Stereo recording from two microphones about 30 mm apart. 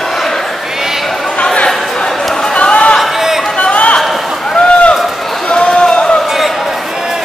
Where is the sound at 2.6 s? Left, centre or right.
Left.